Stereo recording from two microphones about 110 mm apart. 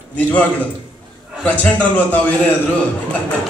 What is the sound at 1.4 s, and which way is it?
A man's voice, 10° left (ahead or behind).